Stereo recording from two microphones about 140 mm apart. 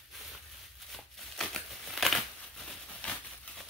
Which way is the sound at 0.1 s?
Centre (ahead or behind).